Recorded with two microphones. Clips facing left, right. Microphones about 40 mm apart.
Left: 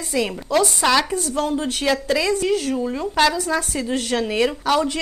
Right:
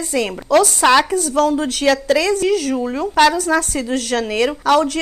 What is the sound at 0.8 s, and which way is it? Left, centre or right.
Speech, right.